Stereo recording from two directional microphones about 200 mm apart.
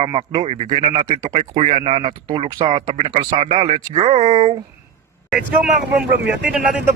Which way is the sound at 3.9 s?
35° right (ahead or behind).